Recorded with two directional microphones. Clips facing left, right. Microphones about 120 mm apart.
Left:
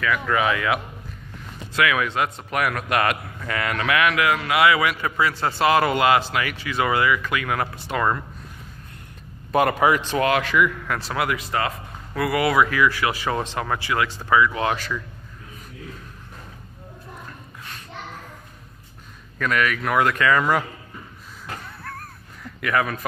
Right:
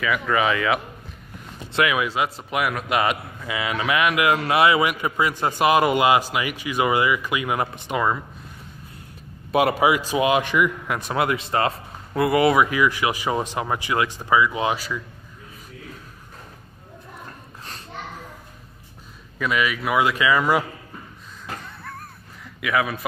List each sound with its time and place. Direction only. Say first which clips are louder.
0.0 s speech: even; 5° right (ahead or behind)
1.7 s a man's voice: even; 25° right (ahead or behind)
2.0 s speech: even; 10° right (ahead or behind)
4.4 s speech: right 1 dB; 30° right (ahead or behind)
9.5 s speech: even; 10° right (ahead or behind)
19.3 s speech: left 1 dB; 10° right (ahead or behind)
21.8 s a sound: left 1 dB; centre (ahead or behind)